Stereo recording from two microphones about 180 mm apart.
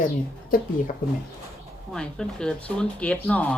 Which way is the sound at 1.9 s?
5° left (ahead or behind).